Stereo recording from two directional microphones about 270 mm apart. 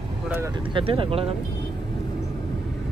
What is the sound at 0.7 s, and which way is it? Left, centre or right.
Speech, centre.